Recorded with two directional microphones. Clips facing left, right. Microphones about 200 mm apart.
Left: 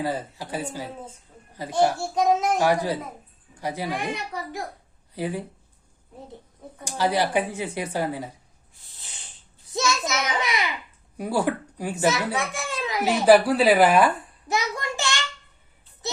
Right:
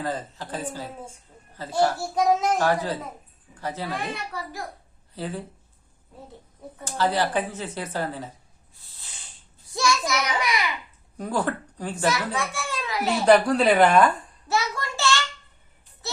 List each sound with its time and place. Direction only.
0.0 s a woman's voice: 10° left (ahead or behind)
2.0 s a child's voice: centre (ahead or behind)
2.6 s a woman's voice: 15° left (ahead or behind)
6.8 s a woman's voice: 15° left (ahead or behind)
9.7 s a child's voice: 20° left (ahead or behind)
11.2 s a woman's voice: 10° left (ahead or behind)
13.2 s a child's voice: 5° left (ahead or behind)